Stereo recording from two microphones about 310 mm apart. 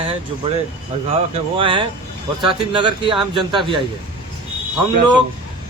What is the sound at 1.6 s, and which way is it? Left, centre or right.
A man's voice, centre.